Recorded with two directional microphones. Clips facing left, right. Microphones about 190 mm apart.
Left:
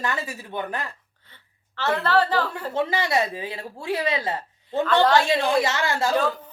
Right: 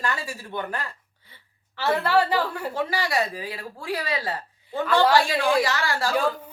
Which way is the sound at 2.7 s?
20° left (ahead or behind).